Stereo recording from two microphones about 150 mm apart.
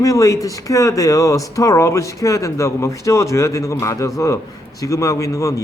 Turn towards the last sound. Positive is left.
turn(degrees=20)  # may be behind; listen again after turning